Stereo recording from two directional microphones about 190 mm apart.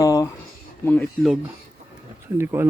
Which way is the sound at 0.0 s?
20° left (ahead or behind).